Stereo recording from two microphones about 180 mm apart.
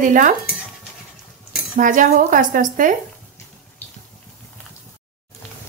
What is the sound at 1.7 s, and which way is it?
A woman's voice, 45° right (ahead or behind).